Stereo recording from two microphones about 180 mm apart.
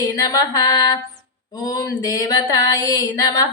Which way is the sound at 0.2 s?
20° left (ahead or behind).